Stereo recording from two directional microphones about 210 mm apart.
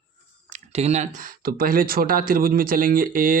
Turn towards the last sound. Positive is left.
turn(degrees=-40)  # may be behind; listen again after turning